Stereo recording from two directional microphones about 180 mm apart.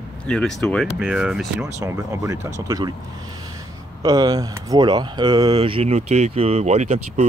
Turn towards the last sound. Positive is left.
turn(degrees=-35)  # may be behind; listen again after turning